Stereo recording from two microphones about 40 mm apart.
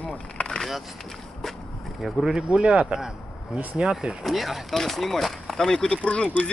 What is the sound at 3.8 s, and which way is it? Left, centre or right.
Speech, right.